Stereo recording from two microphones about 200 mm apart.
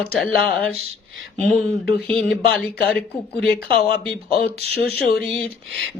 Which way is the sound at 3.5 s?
50° left (ahead or behind).